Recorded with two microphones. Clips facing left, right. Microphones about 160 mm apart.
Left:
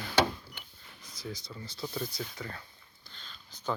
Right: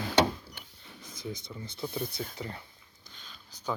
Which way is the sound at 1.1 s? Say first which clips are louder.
Right 2 dB; 20° right (ahead or behind).